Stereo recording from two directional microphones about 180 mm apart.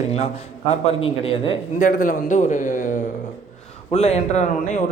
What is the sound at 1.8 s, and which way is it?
Speech, 50° left (ahead or behind).